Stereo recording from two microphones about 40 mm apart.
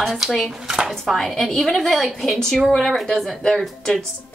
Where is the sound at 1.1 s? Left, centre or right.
Centre.